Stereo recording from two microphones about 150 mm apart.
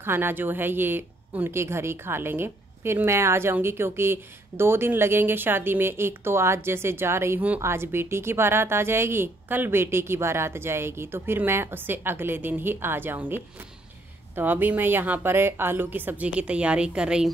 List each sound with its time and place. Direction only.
0.0 s speech: 15° right (ahead or behind)